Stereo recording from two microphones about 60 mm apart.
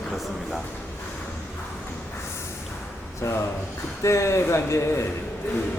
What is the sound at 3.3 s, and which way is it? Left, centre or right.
Speech, left.